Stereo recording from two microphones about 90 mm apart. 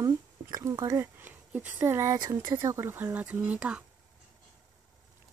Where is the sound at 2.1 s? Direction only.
50° right (ahead or behind).